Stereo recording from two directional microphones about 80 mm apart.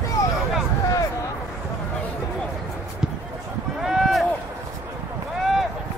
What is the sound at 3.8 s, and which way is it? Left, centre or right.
Run, centre.